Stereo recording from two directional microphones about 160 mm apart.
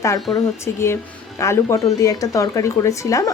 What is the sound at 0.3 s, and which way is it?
A woman's voice, 15° left (ahead or behind).